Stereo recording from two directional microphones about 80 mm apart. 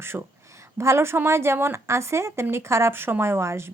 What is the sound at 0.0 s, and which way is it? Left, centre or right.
Speech, right.